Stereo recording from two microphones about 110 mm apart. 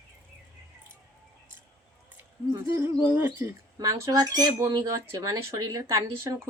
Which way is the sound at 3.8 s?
30° right (ahead or behind).